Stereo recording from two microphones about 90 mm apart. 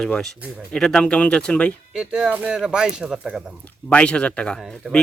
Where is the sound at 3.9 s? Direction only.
10° left (ahead or behind).